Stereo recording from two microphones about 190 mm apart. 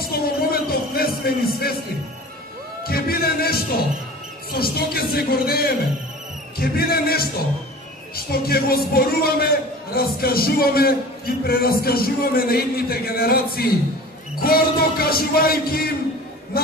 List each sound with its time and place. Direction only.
0.1 s music: 55° left (ahead or behind)
2.8 s music: 50° left (ahead or behind)
4.6 s a man's voice: 55° left (ahead or behind)
8.3 s a man's voice: 50° left (ahead or behind)